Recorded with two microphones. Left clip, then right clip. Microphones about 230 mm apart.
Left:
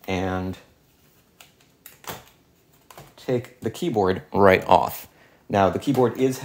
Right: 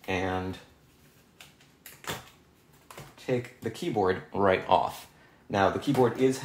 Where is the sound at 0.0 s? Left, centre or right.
Left.